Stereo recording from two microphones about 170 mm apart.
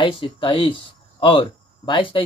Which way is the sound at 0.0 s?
30° left (ahead or behind).